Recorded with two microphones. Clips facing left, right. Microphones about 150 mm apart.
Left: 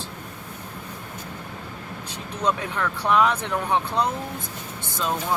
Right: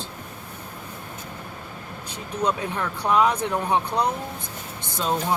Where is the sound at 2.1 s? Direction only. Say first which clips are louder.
Even; 10° right (ahead or behind).